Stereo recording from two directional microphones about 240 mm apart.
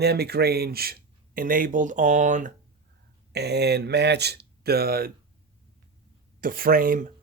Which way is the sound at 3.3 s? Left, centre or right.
Right.